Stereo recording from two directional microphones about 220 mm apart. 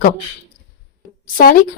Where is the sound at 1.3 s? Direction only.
40° left (ahead or behind).